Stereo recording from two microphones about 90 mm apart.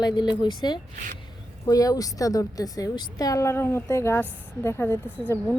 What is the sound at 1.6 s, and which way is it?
A woman's voice, 40° left (ahead or behind).